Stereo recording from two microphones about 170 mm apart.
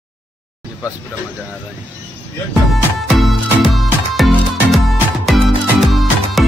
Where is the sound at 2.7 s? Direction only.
Centre (ahead or behind).